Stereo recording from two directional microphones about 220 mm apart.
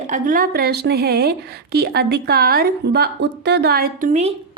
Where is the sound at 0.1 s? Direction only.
40° right (ahead or behind).